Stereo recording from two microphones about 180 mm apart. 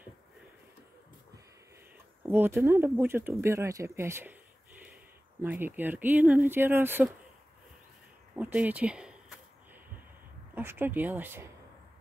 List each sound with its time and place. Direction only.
2.2 s speech: 10° right (ahead or behind)
5.4 s speech: 10° right (ahead or behind)
8.4 s speech: 10° right (ahead or behind)
10.5 s speech: 10° right (ahead or behind)